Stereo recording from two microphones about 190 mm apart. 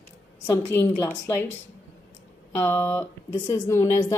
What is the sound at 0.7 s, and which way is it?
Speech, 15° left (ahead or behind).